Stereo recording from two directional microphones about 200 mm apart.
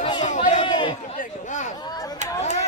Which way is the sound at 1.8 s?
20° left (ahead or behind).